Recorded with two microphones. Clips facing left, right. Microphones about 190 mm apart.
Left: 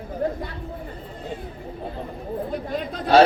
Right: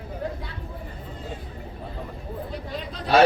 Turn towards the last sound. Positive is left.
turn(degrees=50)  # may be behind; listen again after turning